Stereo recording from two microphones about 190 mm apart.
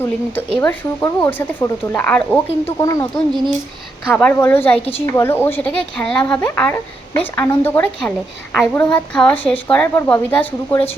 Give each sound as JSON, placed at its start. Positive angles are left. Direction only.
{"t": 0.6, "sound": "a woman's voice", "side_deg": 10}
{"t": 4.1, "sound": "a woman's voice", "side_deg": 5}